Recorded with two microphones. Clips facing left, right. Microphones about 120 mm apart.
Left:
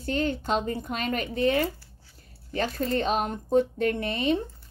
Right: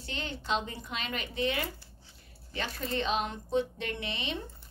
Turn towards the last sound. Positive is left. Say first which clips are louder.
# left 11 dB
turn(degrees=45)  # may be behind; listen again after turning